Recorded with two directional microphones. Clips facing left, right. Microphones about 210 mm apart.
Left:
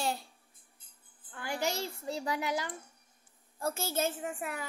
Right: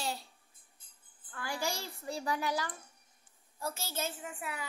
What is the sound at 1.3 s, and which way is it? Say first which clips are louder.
A child's voice: left 3 dB; 20° left (ahead or behind).